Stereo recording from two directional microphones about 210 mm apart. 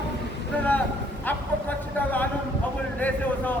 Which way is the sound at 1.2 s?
10° left (ahead or behind).